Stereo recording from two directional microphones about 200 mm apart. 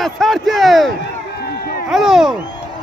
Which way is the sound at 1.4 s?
50° left (ahead or behind).